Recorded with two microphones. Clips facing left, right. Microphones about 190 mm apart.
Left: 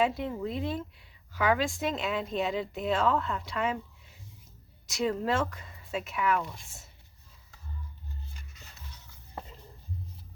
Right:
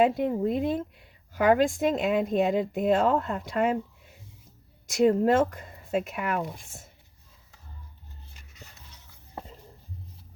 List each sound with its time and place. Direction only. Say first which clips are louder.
0.0 s a woman's voice: right 6 dB; 50° right (ahead or behind)